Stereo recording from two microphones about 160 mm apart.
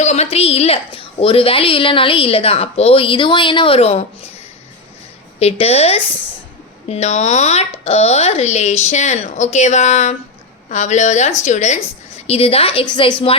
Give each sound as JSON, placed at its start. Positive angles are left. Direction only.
{"t": 0.0, "sound": "a woman's voice", "side_deg": 45}
{"t": 5.4, "sound": "a woman's voice", "side_deg": 40}